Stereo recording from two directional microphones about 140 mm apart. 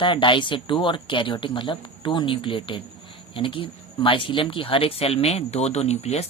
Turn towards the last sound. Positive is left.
turn(degrees=50)  # may be behind; listen again after turning